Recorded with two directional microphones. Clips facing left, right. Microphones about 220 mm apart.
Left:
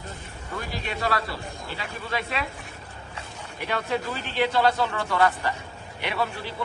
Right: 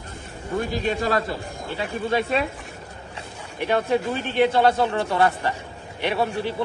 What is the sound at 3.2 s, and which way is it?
Speech, 25° right (ahead or behind).